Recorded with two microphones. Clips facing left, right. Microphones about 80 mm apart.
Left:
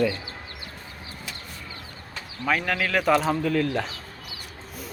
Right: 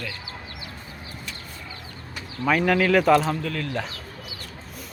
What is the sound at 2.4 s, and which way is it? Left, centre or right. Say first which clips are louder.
Speech: right 5 dB; centre.